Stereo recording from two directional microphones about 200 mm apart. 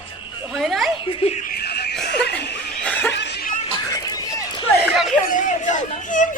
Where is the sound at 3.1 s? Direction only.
60° left (ahead or behind).